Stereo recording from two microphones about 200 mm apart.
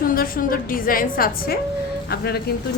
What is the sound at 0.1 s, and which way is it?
A woman's voice, 45° left (ahead or behind).